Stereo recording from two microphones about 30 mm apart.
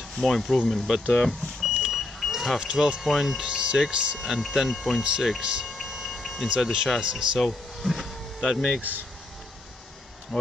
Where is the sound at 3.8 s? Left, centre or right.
Right.